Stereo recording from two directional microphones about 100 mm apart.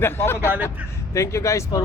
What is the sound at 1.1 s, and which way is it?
Speech, 30° left (ahead or behind).